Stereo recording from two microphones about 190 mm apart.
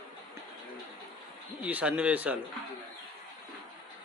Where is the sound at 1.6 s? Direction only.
10° right (ahead or behind).